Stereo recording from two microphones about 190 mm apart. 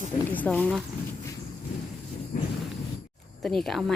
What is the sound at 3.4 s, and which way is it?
Speech, centre (ahead or behind).